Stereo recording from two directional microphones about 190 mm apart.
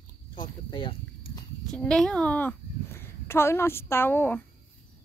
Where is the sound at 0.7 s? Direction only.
25° left (ahead or behind).